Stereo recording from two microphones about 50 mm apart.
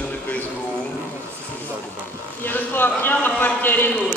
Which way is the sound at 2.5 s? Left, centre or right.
Left.